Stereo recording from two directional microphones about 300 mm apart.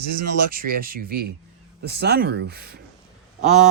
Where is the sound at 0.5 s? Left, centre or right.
Right.